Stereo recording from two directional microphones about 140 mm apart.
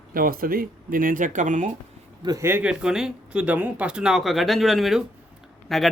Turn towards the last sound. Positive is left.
turn(degrees=0)  # may be behind; listen again after turning